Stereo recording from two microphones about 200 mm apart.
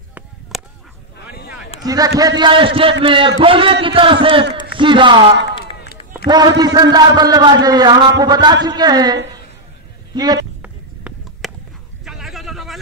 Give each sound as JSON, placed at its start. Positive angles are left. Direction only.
{"t": 0.5, "sound": "honk", "side_deg": 0}
{"t": 1.9, "sound": "a man's voice", "side_deg": -20}
{"t": 10.6, "sound": "a sound", "side_deg": -5}